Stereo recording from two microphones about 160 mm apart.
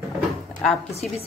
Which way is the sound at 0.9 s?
40° left (ahead or behind).